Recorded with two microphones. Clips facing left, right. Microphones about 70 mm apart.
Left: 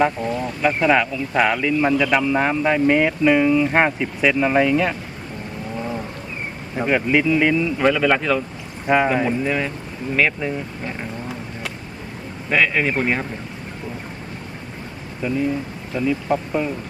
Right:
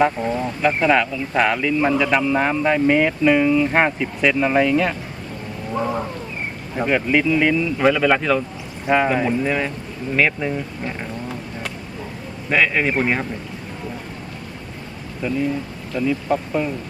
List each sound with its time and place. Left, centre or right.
0.2 s speech: right
0.8 s a man's voice: centre
6.7 s a man's voice: centre
15.2 s a man's voice: centre